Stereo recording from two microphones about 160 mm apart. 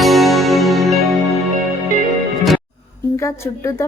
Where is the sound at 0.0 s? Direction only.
Centre (ahead or behind).